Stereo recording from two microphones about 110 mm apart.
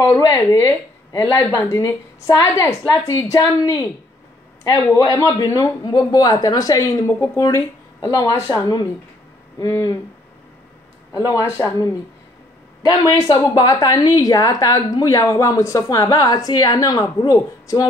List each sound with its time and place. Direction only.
0.0 s a woman's voice: 30° left (ahead or behind)
4.9 s a woman's voice: 30° left (ahead or behind)
11.1 s a woman's voice: 30° left (ahead or behind)